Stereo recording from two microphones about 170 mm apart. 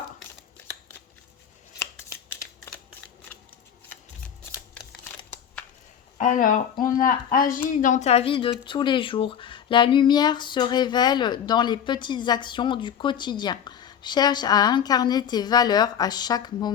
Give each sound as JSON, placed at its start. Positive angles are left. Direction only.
{"t": 1.8, "sound": "shuffling cards", "side_deg": 15}
{"t": 4.7, "sound": "shuffling cards", "side_deg": 5}
{"t": 6.1, "sound": "speech", "side_deg": 50}